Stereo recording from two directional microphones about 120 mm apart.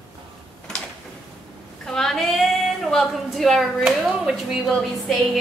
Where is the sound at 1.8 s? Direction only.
5° left (ahead or behind).